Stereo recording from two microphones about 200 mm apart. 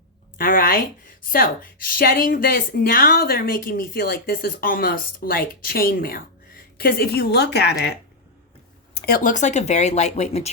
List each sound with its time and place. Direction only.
0.3 s a woman's voice: 45° left (ahead or behind)
9.0 s speech: 45° left (ahead or behind)